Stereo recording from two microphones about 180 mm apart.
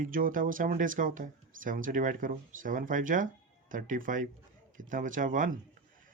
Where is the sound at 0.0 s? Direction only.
50° right (ahead or behind).